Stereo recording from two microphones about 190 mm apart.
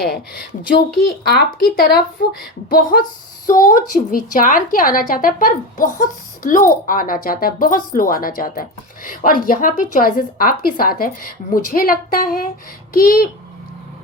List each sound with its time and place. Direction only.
1.3 s a woman's voice: 55° left (ahead or behind)